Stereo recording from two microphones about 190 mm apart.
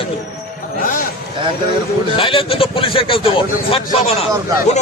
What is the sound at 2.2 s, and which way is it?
A man's voice, 30° left (ahead or behind).